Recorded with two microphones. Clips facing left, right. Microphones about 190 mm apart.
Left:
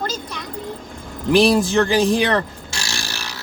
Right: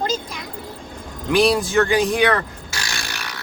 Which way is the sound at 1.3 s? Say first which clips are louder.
Left 2 dB; 30° left (ahead or behind).